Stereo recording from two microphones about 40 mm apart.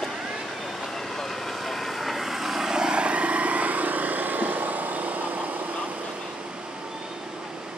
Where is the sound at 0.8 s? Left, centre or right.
Centre; by 5.7 s right.